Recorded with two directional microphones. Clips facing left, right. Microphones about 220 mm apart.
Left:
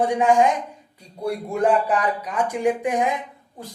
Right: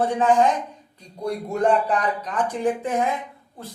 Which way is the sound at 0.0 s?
15° left (ahead or behind).